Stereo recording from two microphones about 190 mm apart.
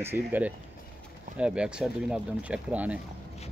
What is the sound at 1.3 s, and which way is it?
Speech, 5° right (ahead or behind).